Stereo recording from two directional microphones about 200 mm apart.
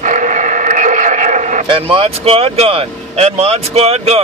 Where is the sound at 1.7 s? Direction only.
25° right (ahead or behind).